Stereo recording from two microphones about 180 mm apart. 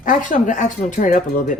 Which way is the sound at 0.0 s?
45° left (ahead or behind).